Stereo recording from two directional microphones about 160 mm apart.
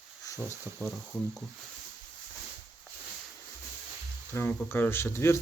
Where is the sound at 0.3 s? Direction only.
20° left (ahead or behind).